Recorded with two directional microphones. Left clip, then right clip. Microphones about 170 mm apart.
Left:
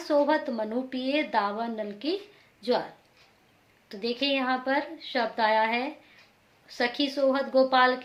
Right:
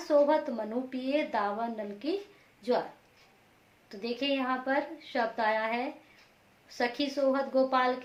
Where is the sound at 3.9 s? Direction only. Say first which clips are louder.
Left 4 dB; 20° left (ahead or behind).